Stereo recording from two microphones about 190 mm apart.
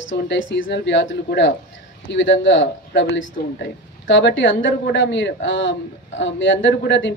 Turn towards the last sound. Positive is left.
turn(degrees=75)  # may be behind; listen again after turning